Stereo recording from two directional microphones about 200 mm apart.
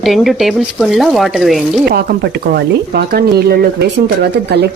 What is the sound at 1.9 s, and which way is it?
Speech, 50° right (ahead or behind).